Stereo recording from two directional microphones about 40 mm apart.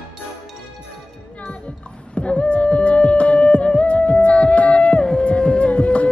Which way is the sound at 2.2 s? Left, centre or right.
Left.